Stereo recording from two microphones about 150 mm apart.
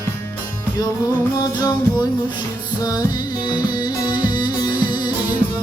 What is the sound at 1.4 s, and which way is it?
Music, 25° left (ahead or behind).